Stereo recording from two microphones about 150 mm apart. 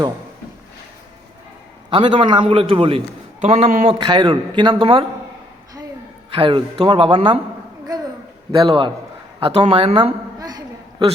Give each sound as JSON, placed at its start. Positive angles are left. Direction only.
{"t": 1.9, "sound": "a man's voice", "side_deg": -35}
{"t": 3.4, "sound": "speech", "side_deg": -50}
{"t": 3.8, "sound": "a man's voice", "side_deg": -30}
{"t": 6.3, "sound": "a man's voice", "side_deg": -35}
{"t": 8.5, "sound": "a man's voice", "side_deg": -35}